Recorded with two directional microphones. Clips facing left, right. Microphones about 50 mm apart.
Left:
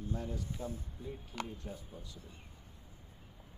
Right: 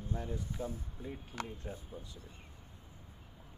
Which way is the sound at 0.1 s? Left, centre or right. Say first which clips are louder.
Right 1 dB; right.